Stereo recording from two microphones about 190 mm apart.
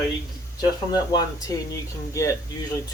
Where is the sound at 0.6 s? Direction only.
20° left (ahead or behind).